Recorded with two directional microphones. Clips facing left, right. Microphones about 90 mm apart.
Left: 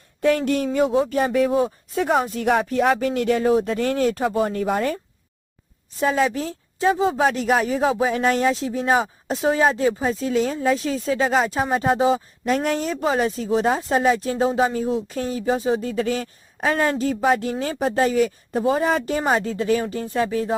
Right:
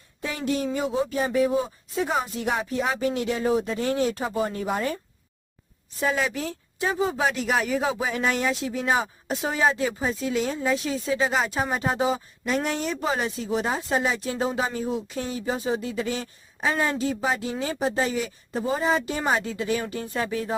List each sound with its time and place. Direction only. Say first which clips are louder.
0.2 s speech: left 8 dB; 55° left (ahead or behind)
6.0 s speech: left 5 dB; 35° left (ahead or behind)
15.8 s speech: left 5 dB; 50° left (ahead or behind)